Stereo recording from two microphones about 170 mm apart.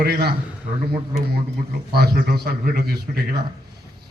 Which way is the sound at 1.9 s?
65° right (ahead or behind).